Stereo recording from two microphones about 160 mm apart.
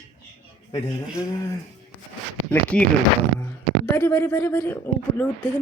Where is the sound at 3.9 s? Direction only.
15° left (ahead or behind).